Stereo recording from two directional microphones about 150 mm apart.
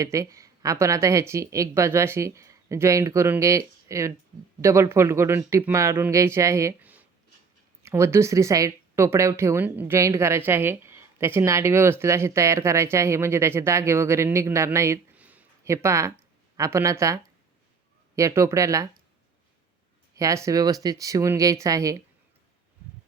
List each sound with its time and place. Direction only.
0.0 s speech: 20° right (ahead or behind)
18.2 s speech: 20° right (ahead or behind)
20.1 s speech: 20° right (ahead or behind)